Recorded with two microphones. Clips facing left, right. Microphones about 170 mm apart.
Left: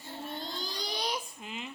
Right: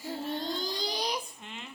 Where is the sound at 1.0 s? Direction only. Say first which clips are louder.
Right 1 dB; centre (ahead or behind).